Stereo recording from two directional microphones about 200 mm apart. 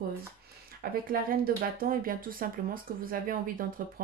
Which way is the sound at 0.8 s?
45° right (ahead or behind).